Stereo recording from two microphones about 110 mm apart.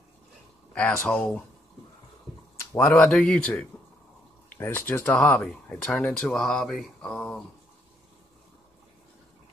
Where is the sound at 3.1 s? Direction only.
10° left (ahead or behind).